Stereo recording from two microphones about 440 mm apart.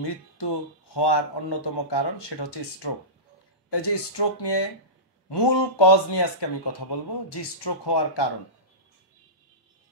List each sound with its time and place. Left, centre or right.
0.0 s speech: left